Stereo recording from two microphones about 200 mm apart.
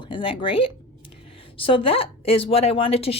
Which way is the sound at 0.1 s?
25° left (ahead or behind).